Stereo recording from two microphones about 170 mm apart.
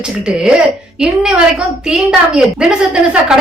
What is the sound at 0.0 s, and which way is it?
A woman's voice, 5° right (ahead or behind).